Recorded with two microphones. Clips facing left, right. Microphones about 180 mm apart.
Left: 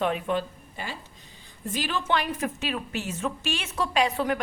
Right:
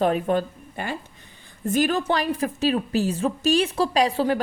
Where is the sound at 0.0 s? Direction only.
40° right (ahead or behind).